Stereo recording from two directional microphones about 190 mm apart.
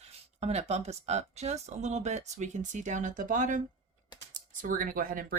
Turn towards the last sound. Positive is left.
turn(degrees=-50)  # may be behind; listen again after turning